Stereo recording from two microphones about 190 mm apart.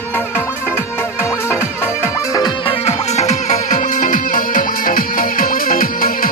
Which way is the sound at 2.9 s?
35° left (ahead or behind).